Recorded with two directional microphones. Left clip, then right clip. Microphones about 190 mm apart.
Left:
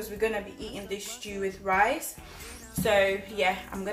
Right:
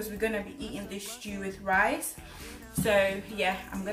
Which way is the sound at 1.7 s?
15° left (ahead or behind).